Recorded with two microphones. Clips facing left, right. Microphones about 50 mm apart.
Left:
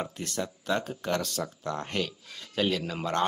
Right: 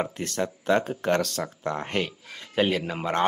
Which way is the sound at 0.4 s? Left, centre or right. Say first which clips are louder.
Right 6 dB; right.